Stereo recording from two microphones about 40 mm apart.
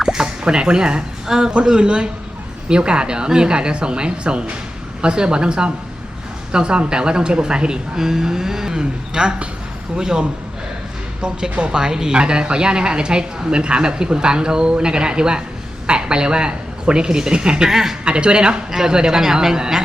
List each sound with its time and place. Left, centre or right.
0.0 s a woman's voice: centre
17.7 s speech: centre
18.0 s a woman's voice: right